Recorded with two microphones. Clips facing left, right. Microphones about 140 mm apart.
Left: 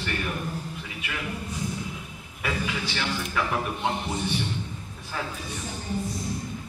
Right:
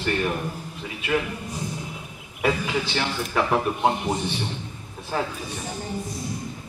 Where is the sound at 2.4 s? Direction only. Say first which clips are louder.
Right 6 dB; 35° right (ahead or behind).